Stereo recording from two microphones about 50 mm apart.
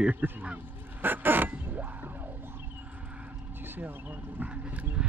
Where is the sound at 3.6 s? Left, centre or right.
Right.